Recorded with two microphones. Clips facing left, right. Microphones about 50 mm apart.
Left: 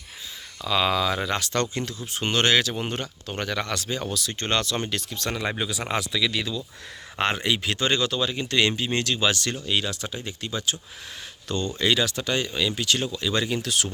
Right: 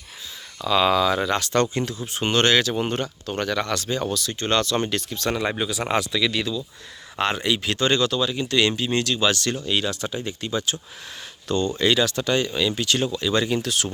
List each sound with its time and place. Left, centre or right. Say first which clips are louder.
0.6 s speech: right 4 dB; centre
1.5 s speech: right 5 dB; right
2.3 s speech: right 2 dB; centre
3.2 s speech: right 3 dB; centre
4.8 s speech: right 4 dB; centre
6.3 s speech: right 3 dB; centre
7.2 s speech: right 1 dB; left
8.2 s speech: right 2 dB; left
9.2 s speech: right 2 dB; centre
9.6 s speech: right 1 dB; centre